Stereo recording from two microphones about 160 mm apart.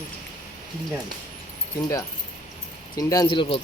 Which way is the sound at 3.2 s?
35° left (ahead or behind).